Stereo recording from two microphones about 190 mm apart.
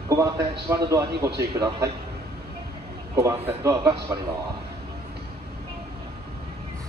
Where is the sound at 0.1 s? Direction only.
15° right (ahead or behind).